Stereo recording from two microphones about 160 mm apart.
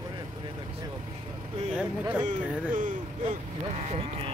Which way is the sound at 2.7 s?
55° right (ahead or behind).